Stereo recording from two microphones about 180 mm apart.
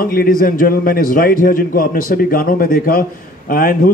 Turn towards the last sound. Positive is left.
turn(degrees=50)  # may be behind; listen again after turning